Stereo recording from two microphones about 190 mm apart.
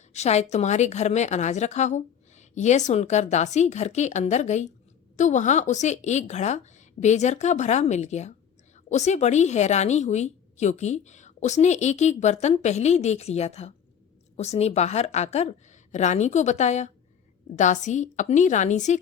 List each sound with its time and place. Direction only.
0.1 s a woman's voice: 35° left (ahead or behind)